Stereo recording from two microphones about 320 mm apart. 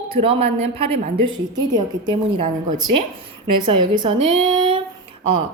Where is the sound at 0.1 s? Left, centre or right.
Centre.